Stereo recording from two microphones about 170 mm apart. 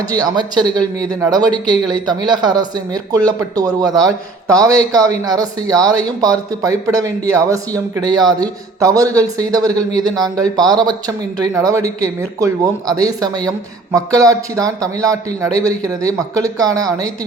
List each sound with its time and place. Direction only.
0.0 s speech: 20° right (ahead or behind)